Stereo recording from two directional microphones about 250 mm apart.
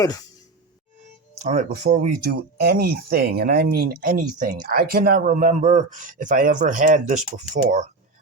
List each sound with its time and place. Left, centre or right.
0.0 s speech: centre
1.4 s speech: right